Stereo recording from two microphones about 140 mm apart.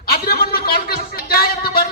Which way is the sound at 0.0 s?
90° left.